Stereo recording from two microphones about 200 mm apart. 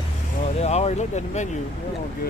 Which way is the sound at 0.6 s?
30° left (ahead or behind).